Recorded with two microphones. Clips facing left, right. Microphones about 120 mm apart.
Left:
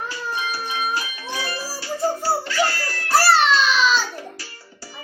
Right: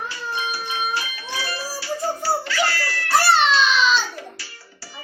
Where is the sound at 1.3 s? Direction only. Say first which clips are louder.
Left 1 dB; 45° left (ahead or behind).